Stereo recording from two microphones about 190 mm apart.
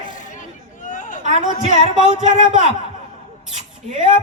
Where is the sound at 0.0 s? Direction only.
40° left (ahead or behind).